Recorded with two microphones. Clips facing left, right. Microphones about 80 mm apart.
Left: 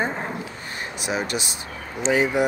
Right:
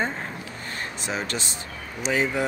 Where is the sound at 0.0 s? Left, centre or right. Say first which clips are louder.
Left 2 dB; centre.